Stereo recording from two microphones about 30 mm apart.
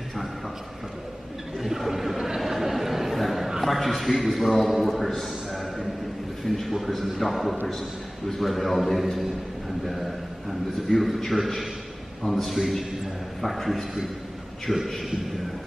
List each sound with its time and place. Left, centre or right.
1.6 s a sound: centre
3.6 s a man's voice: centre
10.9 s a man's voice: centre
14.7 s a man's voice: left